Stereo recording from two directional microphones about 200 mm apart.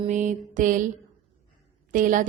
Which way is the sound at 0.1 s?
40° right (ahead or behind).